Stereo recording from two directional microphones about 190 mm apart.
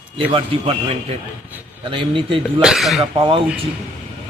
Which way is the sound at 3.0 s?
25° right (ahead or behind).